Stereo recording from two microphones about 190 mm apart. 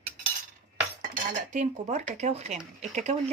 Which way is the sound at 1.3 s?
40° right (ahead or behind).